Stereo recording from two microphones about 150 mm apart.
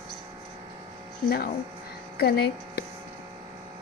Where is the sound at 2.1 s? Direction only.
90° left.